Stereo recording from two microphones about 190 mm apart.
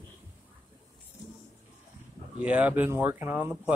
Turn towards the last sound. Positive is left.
turn(degrees=-10)  # may be behind; listen again after turning